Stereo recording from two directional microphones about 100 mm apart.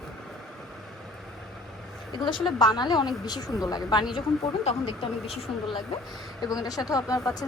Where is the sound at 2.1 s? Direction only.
50° left (ahead or behind).